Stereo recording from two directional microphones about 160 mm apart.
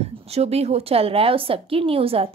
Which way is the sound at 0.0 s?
40° right (ahead or behind).